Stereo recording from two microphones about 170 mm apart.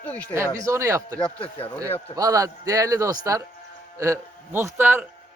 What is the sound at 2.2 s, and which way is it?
A man's voice, 20° right (ahead or behind).